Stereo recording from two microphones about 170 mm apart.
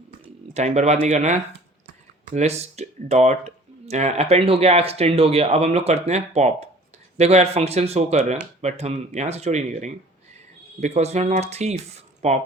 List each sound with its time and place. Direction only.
0.5 s speech: 40° right (ahead or behind)